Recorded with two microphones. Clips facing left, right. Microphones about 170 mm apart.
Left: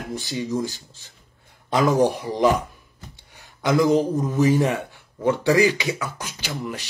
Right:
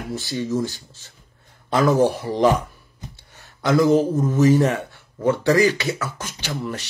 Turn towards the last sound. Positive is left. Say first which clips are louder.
# right 2 dB
turn(degrees=10)  # may be behind; listen again after turning